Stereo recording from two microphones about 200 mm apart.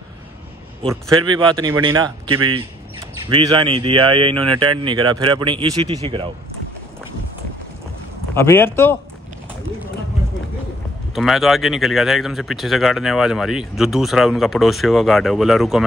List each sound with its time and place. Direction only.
1.2 s speech: 25° right (ahead or behind)
8.4 s speech: 10° left (ahead or behind)
11.1 s speech: centre (ahead or behind)